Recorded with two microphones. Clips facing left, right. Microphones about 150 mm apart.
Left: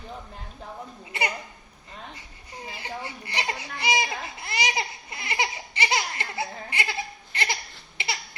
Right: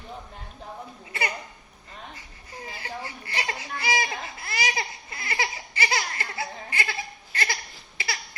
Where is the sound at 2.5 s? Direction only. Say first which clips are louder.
Left 1 dB; 20° left (ahead or behind).